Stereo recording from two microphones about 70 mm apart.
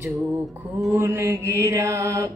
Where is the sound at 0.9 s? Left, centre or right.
Right.